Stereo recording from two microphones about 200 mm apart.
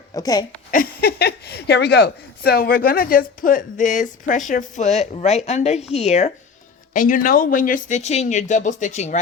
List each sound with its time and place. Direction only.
0.1 s speech: 20° left (ahead or behind)
0.7 s speech: 45° left (ahead or behind)